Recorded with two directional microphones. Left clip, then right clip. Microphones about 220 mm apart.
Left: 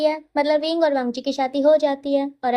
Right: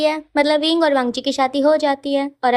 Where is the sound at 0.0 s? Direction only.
15° right (ahead or behind).